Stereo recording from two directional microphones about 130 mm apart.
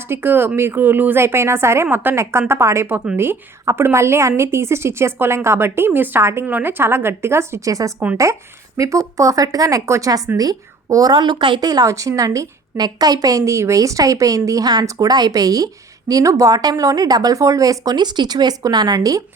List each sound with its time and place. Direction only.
0.1 s a woman's voice: 15° right (ahead or behind)